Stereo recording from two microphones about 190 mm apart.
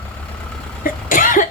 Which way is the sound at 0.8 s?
45° left (ahead or behind).